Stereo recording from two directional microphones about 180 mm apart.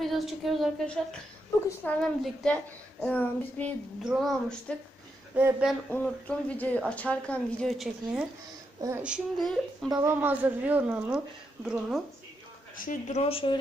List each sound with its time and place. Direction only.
0.0 s a woman's voice: centre (ahead or behind)
5.3 s speech: 5° right (ahead or behind)
5.9 s speech: 10° left (ahead or behind)
9.9 s speech: 10° right (ahead or behind)
12.7 s speech: 50° left (ahead or behind)
13.2 s speech: 30° left (ahead or behind)